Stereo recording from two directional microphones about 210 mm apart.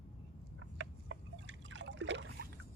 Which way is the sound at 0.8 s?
60° right (ahead or behind).